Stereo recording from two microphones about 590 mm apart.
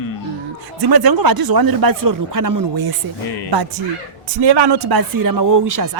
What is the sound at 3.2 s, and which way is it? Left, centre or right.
Speech, left.